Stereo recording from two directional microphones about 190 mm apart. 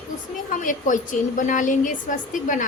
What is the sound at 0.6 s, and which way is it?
A woman's voice, 40° left (ahead or behind).